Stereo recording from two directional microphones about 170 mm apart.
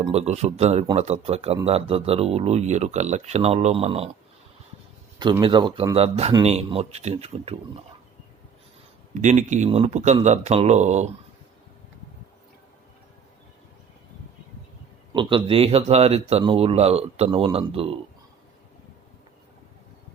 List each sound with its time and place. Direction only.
0.0 s speech: 40° right (ahead or behind)
5.2 s speech: 25° right (ahead or behind)
9.2 s speech: 45° right (ahead or behind)
15.1 s speech: 30° right (ahead or behind)